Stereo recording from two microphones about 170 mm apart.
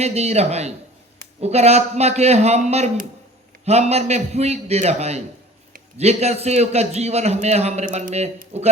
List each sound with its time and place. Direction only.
0.0 s a man's voice: 40° right (ahead or behind)